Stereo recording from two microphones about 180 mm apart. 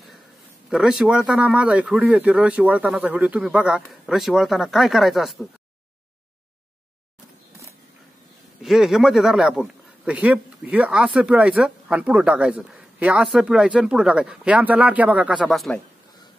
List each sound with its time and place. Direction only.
0.7 s a man's voice: 5° right (ahead or behind)
8.6 s a man's voice: centre (ahead or behind)